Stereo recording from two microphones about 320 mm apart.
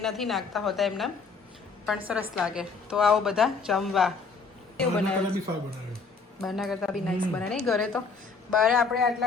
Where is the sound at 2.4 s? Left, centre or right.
Centre.